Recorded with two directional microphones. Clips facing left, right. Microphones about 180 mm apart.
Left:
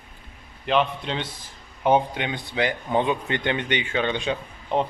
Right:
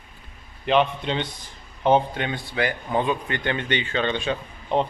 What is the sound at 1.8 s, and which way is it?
A man's voice, 10° left (ahead or behind).